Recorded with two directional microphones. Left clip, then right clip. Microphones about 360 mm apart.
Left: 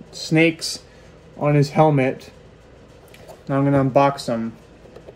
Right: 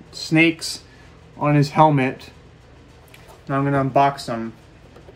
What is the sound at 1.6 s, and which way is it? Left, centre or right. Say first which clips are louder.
Speech: right 1 dB; right.